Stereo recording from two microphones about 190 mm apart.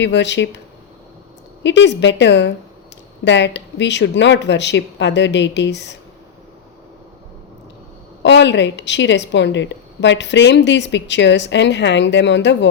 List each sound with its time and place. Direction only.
0.0 s a woman's voice: 70° left (ahead or behind)
1.6 s a woman's voice: 70° left (ahead or behind)
8.2 s a woman's voice: 70° left (ahead or behind)